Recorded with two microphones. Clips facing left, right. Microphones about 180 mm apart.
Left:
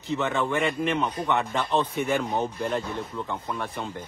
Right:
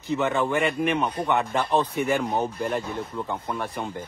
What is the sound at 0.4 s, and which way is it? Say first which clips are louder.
Speech: right 2 dB; centre (ahead or behind).